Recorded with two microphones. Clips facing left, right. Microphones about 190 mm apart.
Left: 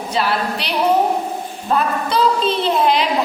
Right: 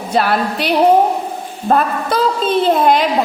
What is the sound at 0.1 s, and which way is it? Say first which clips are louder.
A woman's voice: right 5 dB; 50° right (ahead or behind).